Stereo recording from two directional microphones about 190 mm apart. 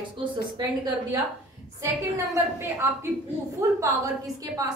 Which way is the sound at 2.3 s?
15° right (ahead or behind).